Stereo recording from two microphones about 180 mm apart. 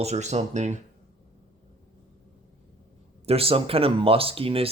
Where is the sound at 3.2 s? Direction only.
30° right (ahead or behind).